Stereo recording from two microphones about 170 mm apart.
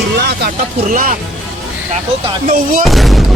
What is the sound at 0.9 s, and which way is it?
Speech, 55° right (ahead or behind).